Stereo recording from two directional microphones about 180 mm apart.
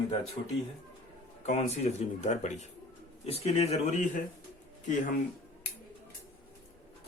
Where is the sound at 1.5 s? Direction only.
35° left (ahead or behind).